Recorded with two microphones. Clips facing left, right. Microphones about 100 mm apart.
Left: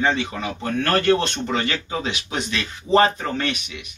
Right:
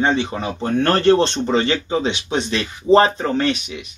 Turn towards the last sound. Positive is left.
turn(degrees=-30)  # may be behind; listen again after turning